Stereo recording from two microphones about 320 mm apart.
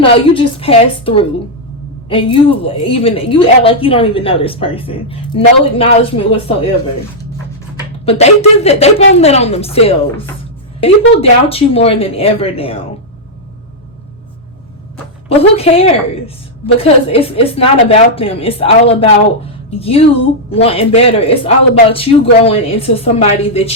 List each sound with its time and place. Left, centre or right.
0.0 s a woman's voice: centre
8.0 s a woman's voice: centre
15.3 s a woman's voice: centre